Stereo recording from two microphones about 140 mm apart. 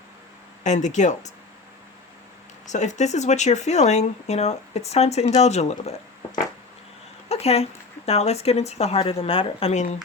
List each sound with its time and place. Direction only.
0.6 s speech: 60° left (ahead or behind)
2.6 s speech: 55° left (ahead or behind)
7.3 s speech: 50° left (ahead or behind)